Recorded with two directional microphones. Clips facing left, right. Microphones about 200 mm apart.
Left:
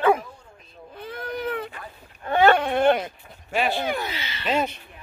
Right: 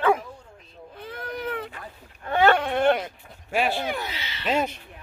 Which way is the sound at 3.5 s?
5° right (ahead or behind).